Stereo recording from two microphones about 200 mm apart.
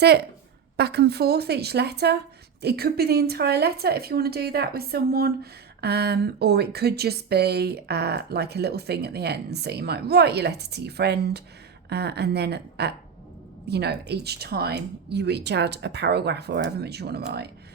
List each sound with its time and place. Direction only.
0.8 s a woman's voice: 55° right (ahead or behind)